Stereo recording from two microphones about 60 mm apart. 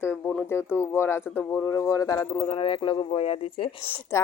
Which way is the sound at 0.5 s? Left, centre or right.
Left.